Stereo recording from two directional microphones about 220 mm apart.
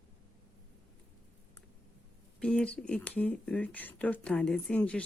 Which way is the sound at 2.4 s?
5° left (ahead or behind).